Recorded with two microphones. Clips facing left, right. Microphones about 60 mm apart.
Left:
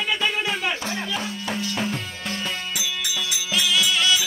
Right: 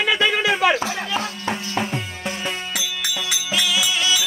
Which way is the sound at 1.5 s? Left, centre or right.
Right.